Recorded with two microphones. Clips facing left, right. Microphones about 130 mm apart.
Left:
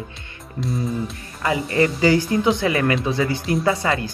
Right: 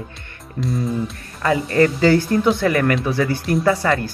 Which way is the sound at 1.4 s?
20° left (ahead or behind).